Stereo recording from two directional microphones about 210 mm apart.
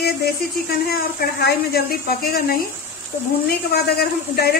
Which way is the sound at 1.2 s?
50° left (ahead or behind).